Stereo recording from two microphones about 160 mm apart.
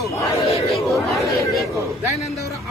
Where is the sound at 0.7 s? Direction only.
Centre (ahead or behind).